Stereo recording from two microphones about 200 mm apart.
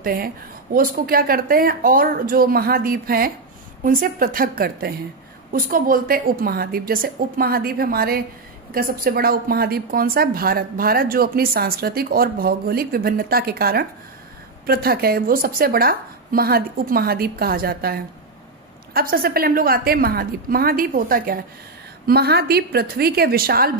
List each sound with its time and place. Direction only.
0.0 s a woman's voice: 45° right (ahead or behind)